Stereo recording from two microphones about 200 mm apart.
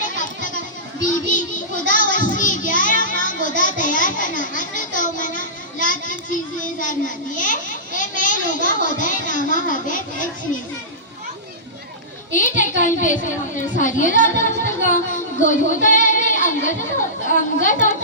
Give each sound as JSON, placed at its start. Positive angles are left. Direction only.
{"t": 0.0, "sound": "children playing", "side_deg": 40}
{"t": 1.0, "sound": "a child's voice", "side_deg": 40}
{"t": 12.3, "sound": "a child's voice", "side_deg": 40}
{"t": 15.4, "sound": "child singing", "side_deg": 40}
{"t": 17.2, "sound": "a child's voice", "side_deg": 40}